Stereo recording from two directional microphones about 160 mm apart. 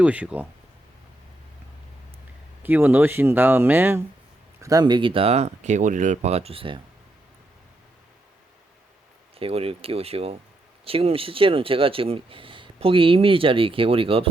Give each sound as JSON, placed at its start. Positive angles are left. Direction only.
{"t": 0.0, "sound": "speech", "side_deg": -10}
{"t": 2.6, "sound": "speech", "side_deg": -10}
{"t": 4.6, "sound": "speech", "side_deg": -25}
{"t": 9.4, "sound": "speech", "side_deg": -35}